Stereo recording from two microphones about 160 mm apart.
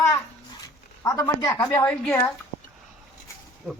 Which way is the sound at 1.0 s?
20° left (ahead or behind).